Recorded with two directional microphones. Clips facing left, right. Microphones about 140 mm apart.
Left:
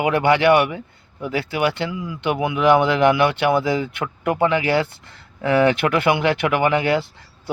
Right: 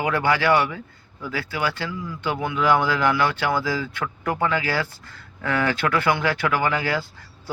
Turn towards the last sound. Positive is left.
turn(degrees=25)  # may be behind; listen again after turning